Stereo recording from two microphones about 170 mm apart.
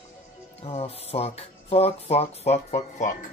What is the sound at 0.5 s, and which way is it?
Speech, 35° left (ahead or behind).